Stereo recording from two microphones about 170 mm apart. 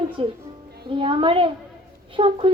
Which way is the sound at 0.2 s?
35° right (ahead or behind).